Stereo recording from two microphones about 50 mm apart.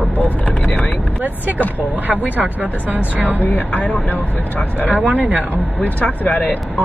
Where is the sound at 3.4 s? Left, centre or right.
Left.